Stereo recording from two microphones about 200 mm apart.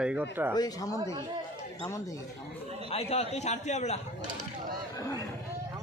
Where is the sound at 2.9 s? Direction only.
30° left (ahead or behind).